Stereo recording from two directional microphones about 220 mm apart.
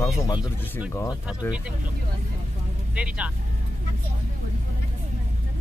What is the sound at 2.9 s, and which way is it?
Speech, 5° right (ahead or behind).